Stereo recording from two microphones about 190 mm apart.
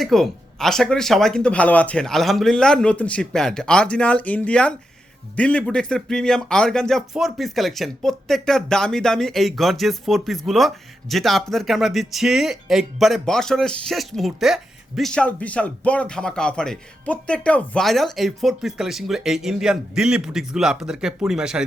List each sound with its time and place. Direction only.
0.0 s speech: centre (ahead or behind)